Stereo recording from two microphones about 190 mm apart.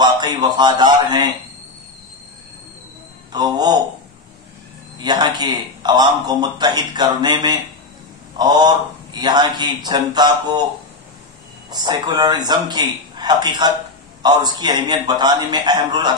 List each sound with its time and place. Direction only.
0.0 s a man's voice: 20° right (ahead or behind)
3.3 s a man's voice: 20° right (ahead or behind)
4.9 s a man's voice: 25° right (ahead or behind)
11.7 s a man's voice: 20° right (ahead or behind)